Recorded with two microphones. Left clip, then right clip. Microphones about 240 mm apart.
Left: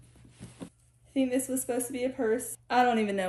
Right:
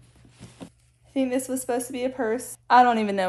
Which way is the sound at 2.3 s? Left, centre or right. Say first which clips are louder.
Right 1 dB; centre.